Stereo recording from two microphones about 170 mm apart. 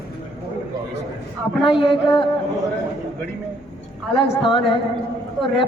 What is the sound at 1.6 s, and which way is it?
Speech, 30° left (ahead or behind).